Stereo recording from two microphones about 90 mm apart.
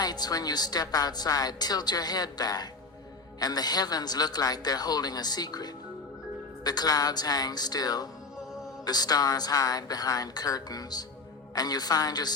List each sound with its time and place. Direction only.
0.0 s a woman's voice: 50° left (ahead or behind)